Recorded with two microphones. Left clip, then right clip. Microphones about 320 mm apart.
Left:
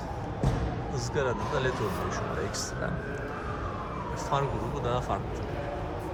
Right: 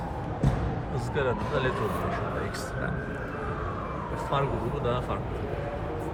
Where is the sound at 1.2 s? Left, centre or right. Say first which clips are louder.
Right 1 dB; centre.